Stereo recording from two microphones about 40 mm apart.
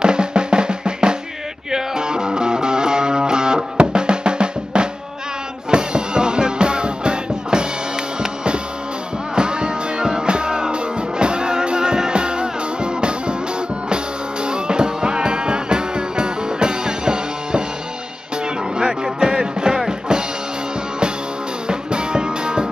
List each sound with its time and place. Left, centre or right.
0.0 s drum: right
1.7 s music: centre
9.3 s music: right
18.8 s music: centre
19.9 s drum kit: centre
21.6 s music: right